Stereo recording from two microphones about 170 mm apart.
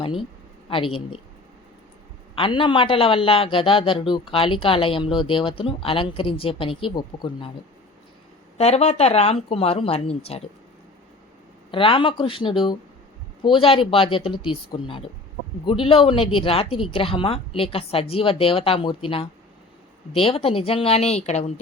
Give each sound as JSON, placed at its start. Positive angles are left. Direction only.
{"t": 0.7, "sound": "a man's voice", "side_deg": 30}
{"t": 2.3, "sound": "a man's voice", "side_deg": 30}
{"t": 8.5, "sound": "a man's voice", "side_deg": 40}
{"t": 11.7, "sound": "a man's voice", "side_deg": 30}